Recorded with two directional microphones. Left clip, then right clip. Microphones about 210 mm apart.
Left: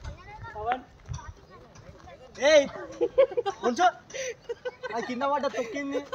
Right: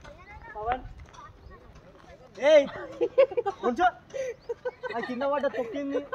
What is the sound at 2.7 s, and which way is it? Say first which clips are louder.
Speech: even; centre (ahead or behind).